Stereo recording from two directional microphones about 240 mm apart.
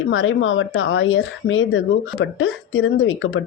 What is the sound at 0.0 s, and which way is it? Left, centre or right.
Speech, left.